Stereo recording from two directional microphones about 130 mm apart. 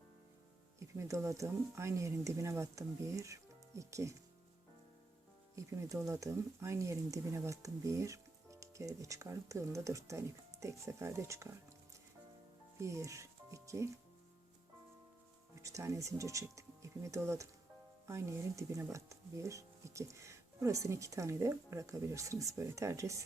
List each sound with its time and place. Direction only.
0.8 s speech: 25° right (ahead or behind)
5.5 s speech: 25° right (ahead or behind)
12.8 s speech: 25° right (ahead or behind)
15.5 s speech: 25° right (ahead or behind)